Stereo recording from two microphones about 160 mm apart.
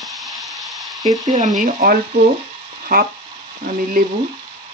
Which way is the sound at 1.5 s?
55° right (ahead or behind).